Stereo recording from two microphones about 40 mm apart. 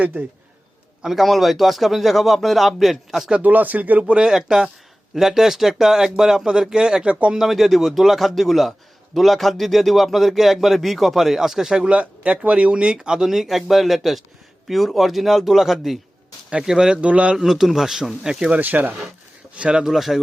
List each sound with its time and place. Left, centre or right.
1.0 s speech: centre
3.4 s speech: right
4.0 s speech: right
7.0 s speech: right
7.3 s speech: centre
11.9 s speech: right
13.0 s speech: centre
17.0 s a man's voice: right
17.3 s speech: centre
18.5 s speech: right
19.7 s speech: centre